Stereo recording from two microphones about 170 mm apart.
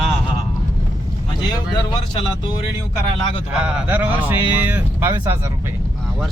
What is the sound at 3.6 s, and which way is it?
Speech, 10° right (ahead or behind).